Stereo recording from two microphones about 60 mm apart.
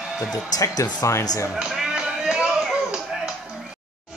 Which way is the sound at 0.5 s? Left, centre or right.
Left.